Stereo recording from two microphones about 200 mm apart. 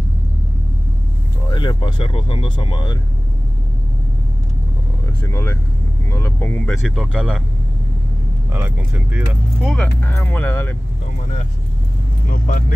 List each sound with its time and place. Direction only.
1.5 s speech: 25° left (ahead or behind)
5.0 s speech: 15° left (ahead or behind)
6.8 s speech: centre (ahead or behind)
8.5 s speech: 10° right (ahead or behind)
9.9 s speech: 10° left (ahead or behind)
12.3 s speech: 45° left (ahead or behind)